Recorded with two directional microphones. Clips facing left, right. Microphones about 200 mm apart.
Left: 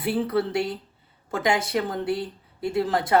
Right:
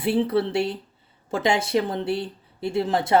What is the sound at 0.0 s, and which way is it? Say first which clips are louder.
A woman's voice: right 2 dB; 25° right (ahead or behind).